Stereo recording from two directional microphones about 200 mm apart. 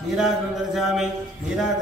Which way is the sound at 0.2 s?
Centre (ahead or behind).